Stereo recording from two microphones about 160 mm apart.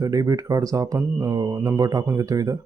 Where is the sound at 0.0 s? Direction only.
20° right (ahead or behind).